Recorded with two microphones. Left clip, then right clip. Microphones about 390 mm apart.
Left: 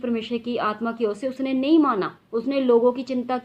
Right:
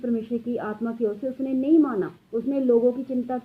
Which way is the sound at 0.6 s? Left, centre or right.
Centre.